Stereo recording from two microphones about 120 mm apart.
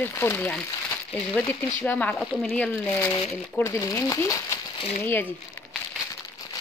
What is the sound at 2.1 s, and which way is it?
Speech, centre (ahead or behind).